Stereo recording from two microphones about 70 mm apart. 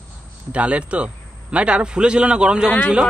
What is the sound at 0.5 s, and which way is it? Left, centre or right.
A man's voice, centre.